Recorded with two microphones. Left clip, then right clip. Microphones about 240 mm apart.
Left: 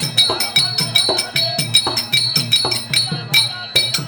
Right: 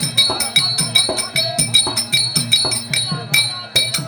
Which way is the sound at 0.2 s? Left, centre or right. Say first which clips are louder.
Even; centre.